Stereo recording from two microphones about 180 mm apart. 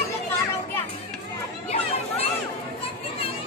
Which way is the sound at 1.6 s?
35° left (ahead or behind).